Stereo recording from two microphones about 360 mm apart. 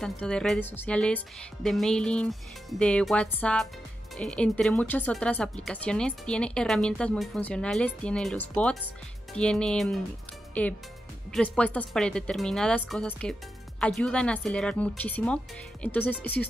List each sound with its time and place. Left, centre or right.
0.0 s a woman's voice: centre